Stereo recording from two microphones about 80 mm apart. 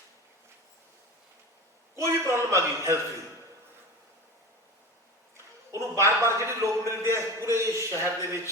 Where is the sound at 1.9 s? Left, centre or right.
Right.